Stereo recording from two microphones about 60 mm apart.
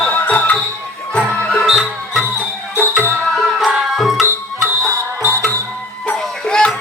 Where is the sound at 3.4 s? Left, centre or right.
Centre.